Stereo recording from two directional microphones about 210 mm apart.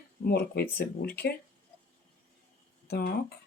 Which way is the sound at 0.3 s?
45° left (ahead or behind).